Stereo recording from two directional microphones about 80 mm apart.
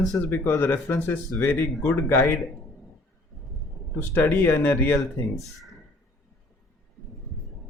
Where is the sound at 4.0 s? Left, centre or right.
Left.